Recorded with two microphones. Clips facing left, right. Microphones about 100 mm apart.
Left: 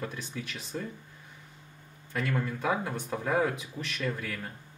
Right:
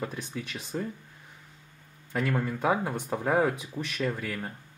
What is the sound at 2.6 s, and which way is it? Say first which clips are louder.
Speech: right 3 dB; 10° right (ahead or behind).